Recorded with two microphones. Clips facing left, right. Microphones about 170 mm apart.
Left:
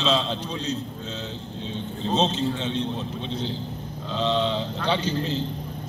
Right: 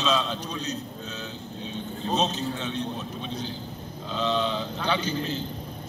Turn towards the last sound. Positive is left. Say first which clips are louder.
# left 2 dB
turn(degrees=30)  # may be behind; listen again after turning